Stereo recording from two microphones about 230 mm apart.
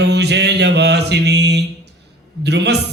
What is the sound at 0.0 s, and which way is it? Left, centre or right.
Mantra, right.